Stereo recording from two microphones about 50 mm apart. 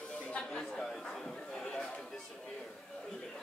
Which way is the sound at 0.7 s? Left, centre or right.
Centre.